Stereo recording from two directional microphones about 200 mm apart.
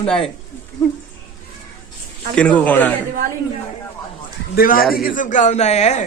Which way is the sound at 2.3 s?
5° left (ahead or behind).